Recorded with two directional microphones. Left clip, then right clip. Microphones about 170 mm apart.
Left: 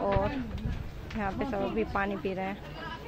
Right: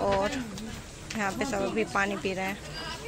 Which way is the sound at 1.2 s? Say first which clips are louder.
Right 2 dB; 10° right (ahead or behind).